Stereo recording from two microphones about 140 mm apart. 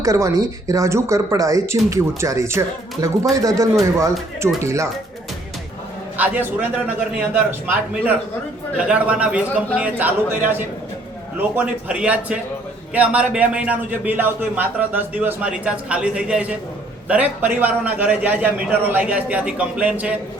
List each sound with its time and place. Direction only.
0.0 s speech: 20° right (ahead or behind)
6.1 s a man's voice: 10° right (ahead or behind)
8.9 s a man's voice: 10° right (ahead or behind)